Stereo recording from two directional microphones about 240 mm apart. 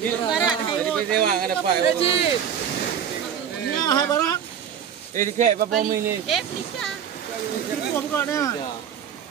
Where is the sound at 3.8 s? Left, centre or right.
Centre.